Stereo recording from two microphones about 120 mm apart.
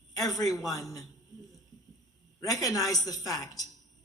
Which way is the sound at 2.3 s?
30° left (ahead or behind).